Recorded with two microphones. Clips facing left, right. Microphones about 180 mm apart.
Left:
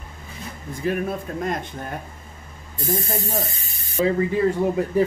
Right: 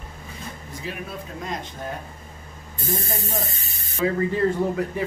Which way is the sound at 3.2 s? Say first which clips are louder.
Left 3 dB; 35° left (ahead or behind).